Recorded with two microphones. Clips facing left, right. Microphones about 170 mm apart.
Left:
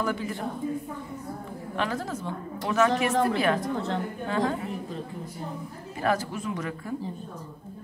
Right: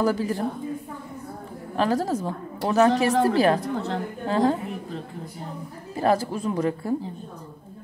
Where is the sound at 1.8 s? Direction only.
35° right (ahead or behind).